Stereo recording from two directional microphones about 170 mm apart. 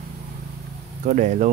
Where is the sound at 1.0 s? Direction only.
45° right (ahead or behind).